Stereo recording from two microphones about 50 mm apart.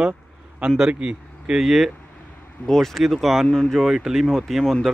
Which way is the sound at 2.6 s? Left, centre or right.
Centre.